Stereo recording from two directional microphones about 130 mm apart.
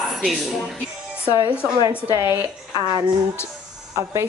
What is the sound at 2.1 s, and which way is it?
Speech, 20° right (ahead or behind).